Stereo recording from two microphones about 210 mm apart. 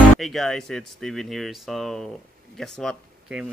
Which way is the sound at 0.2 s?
Centre (ahead or behind).